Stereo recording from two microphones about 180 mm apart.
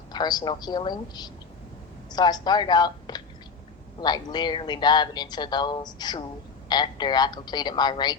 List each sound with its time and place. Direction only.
0.1 s speech: 25° left (ahead or behind)